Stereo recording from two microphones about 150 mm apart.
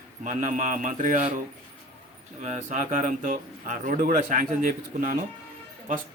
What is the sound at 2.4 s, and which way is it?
A man's voice, 55° right (ahead or behind).